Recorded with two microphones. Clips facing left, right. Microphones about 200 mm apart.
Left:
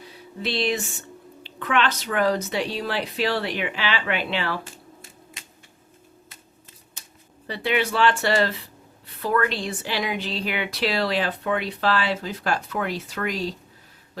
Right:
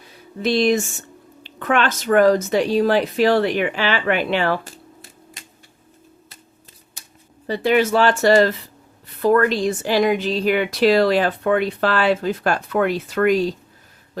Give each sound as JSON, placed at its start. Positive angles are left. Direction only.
{"t": 0.4, "sound": "a woman's voice", "side_deg": -45}
{"t": 7.4, "sound": "a woman's voice", "side_deg": -40}